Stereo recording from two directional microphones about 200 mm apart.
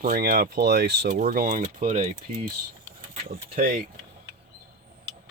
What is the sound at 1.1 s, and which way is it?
Speech, 40° right (ahead or behind).